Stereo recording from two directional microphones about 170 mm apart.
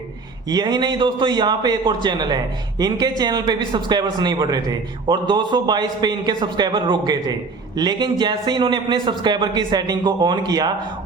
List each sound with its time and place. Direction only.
0.4 s a man's voice: 25° right (ahead or behind)